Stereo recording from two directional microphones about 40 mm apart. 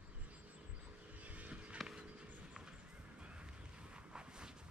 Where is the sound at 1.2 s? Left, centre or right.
Right.